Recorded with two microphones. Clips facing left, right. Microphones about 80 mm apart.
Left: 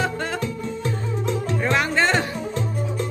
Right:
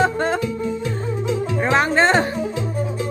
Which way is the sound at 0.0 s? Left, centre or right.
Right.